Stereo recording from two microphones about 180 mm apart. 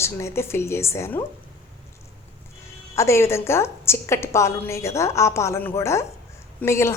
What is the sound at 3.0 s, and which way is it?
A woman's voice, 15° left (ahead or behind).